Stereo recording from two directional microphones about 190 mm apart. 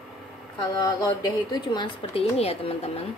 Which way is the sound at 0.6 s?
20° left (ahead or behind).